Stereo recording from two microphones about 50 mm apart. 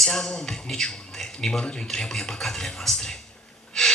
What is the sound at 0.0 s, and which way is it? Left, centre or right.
Speech, centre.